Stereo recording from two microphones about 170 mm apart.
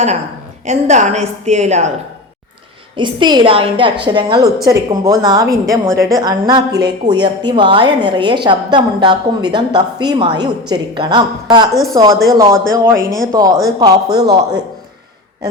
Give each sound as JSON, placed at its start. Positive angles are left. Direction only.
{"t": 0.6, "sound": "a woman's voice", "side_deg": -45}
{"t": 2.9, "sound": "a woman's voice", "side_deg": -25}